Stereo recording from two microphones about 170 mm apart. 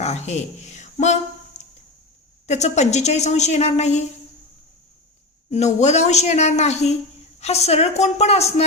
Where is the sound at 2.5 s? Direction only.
40° left (ahead or behind).